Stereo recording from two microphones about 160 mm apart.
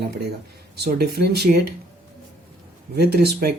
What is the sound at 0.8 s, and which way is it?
Speech, 80° right.